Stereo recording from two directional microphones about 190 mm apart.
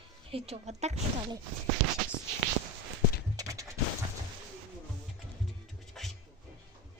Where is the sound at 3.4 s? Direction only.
15° right (ahead or behind).